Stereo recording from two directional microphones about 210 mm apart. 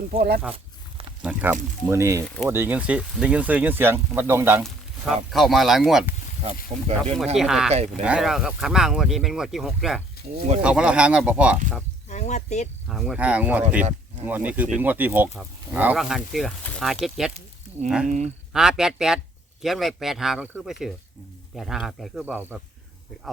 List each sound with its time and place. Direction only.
0.1 s speech: 45° right (ahead or behind)
1.2 s speech: 5° right (ahead or behind)
6.7 s speech: 30° right (ahead or behind)
7.3 s speech: centre (ahead or behind)
7.7 s speech: 30° right (ahead or behind)
8.0 s speech: 5° right (ahead or behind)
12.0 s speech: 35° left (ahead or behind)
12.9 s speech: centre (ahead or behind)